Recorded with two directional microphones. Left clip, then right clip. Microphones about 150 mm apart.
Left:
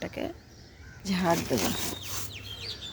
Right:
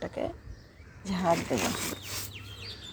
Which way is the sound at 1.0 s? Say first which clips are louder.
Even; 25° left (ahead or behind).